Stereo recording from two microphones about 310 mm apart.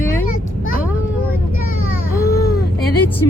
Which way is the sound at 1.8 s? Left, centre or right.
Left.